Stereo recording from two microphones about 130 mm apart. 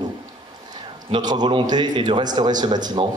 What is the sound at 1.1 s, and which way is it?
A man's voice, 35° right (ahead or behind).